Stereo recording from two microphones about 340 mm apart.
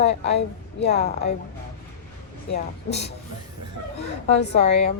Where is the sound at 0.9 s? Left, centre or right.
Centre.